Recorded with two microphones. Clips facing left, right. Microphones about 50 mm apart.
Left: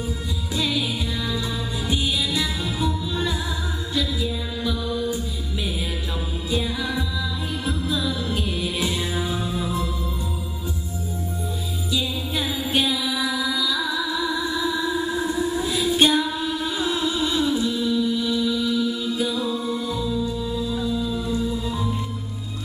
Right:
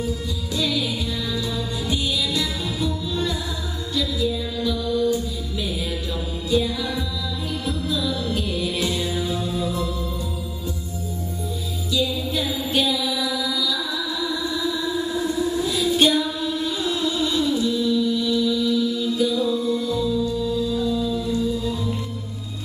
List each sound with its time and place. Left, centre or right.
0.6 s music: left
11.9 s music: left